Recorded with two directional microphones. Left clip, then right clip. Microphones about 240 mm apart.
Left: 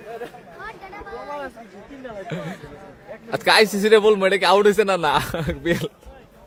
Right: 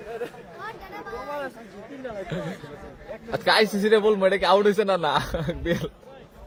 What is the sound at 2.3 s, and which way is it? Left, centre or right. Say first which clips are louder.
Speech: left 4 dB; left.